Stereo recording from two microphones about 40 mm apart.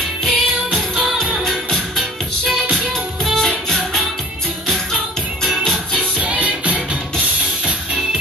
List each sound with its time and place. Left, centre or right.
0.2 s music: centre
5.4 s music: centre
6.1 s music: right